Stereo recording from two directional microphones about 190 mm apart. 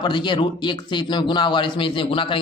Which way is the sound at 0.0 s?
25° left (ahead or behind).